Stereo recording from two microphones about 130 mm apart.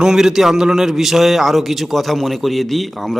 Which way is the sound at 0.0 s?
5° right (ahead or behind).